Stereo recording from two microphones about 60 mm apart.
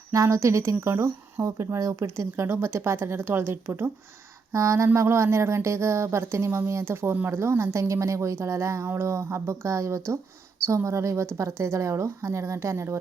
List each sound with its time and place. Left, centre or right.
0.1 s speech: right
2.3 s a woman's voice: right
4.5 s a woman's voice: right